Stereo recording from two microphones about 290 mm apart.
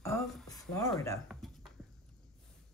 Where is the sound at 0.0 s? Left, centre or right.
Centre.